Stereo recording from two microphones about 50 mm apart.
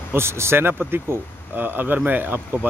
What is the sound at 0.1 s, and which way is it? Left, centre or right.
Speech, right.